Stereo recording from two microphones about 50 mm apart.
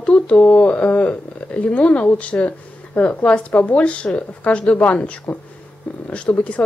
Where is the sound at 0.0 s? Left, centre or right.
Left.